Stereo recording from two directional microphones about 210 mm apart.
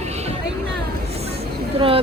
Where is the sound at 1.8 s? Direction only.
25° right (ahead or behind).